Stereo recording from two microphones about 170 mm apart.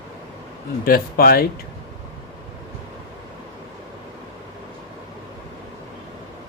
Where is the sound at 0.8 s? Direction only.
60° left (ahead or behind).